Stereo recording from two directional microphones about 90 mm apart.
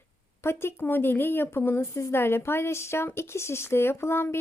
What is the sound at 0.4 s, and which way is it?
Speech, 25° left (ahead or behind).